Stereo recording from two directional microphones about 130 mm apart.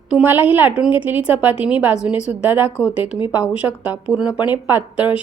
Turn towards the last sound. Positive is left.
turn(degrees=-10)  # may be behind; listen again after turning